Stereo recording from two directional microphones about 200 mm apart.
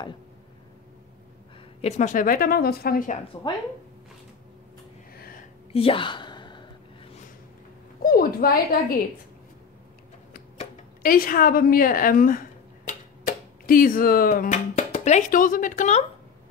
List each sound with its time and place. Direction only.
1.8 s a woman's voice: 35° left (ahead or behind)
5.7 s a sound: 30° left (ahead or behind)
8.0 s a woman's voice: 45° left (ahead or behind)
11.0 s a woman's voice: 45° left (ahead or behind)